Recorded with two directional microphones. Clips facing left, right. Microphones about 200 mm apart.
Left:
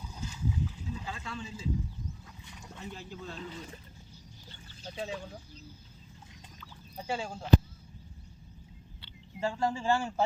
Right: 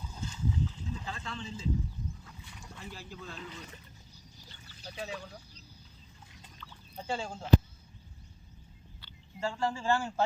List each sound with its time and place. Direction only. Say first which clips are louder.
0.1 s a sound: even; 10° left (ahead or behind)
2.2 s speech: left 1 dB; 20° left (ahead or behind)
4.9 s speech: left 2 dB; 25° left (ahead or behind)
7.1 s speech: left 1 dB; 5° left (ahead or behind)
9.0 s speech: left 2 dB; 20° left (ahead or behind)